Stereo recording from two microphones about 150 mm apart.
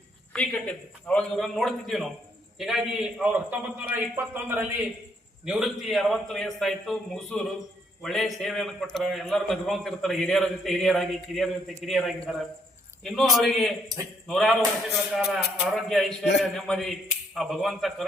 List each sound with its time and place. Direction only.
0.3 s a man's voice: 10° left (ahead or behind); by 4.0 s 10° right (ahead or behind)
5.5 s a man's voice: centre (ahead or behind)
13.8 s a man's voice: 25° right (ahead or behind)
14.3 s a man's voice: centre (ahead or behind)